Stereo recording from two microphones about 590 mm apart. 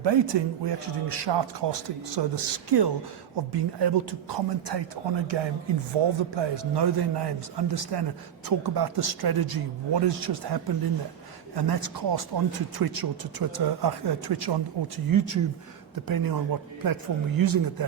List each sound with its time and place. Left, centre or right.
0.0 s speech: right